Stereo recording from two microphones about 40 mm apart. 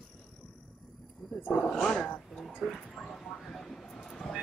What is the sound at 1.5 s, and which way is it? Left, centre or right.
Speech, left.